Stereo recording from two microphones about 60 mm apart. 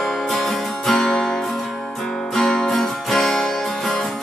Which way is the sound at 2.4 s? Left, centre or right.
Centre.